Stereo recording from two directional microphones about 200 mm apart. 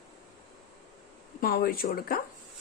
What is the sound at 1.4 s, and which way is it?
Speech, 50° left (ahead or behind).